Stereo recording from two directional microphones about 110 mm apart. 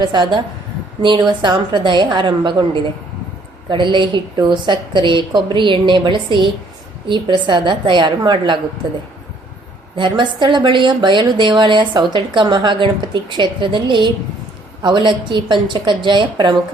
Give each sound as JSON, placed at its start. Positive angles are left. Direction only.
{"t": 0.0, "sound": "a woman's voice", "side_deg": -45}
{"t": 3.7, "sound": "a woman's voice", "side_deg": -45}
{"t": 10.0, "sound": "a woman's voice", "side_deg": -45}